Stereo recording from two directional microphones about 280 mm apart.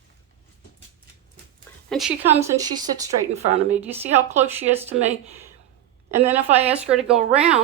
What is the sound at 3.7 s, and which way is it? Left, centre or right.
Speech, centre.